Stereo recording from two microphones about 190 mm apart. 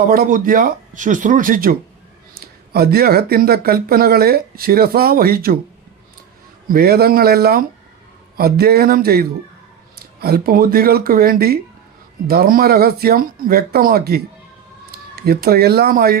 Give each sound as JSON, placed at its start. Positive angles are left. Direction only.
{"t": 0.1, "sound": "speech", "side_deg": -45}
{"t": 2.7, "sound": "speech", "side_deg": -55}
{"t": 6.7, "sound": "speech", "side_deg": -50}